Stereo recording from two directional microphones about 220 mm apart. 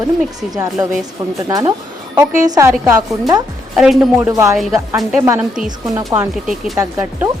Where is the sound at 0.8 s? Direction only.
15° right (ahead or behind).